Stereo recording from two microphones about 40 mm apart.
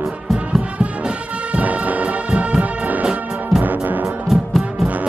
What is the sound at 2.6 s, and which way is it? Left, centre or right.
Music, right.